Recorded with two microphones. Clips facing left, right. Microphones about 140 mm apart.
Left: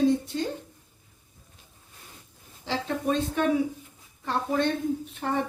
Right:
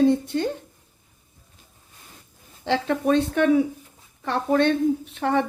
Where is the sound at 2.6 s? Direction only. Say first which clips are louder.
Right 6 dB; 70° right (ahead or behind).